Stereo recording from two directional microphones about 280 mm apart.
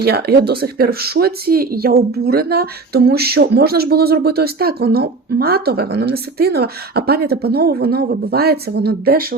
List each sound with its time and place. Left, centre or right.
0.0 s speech: right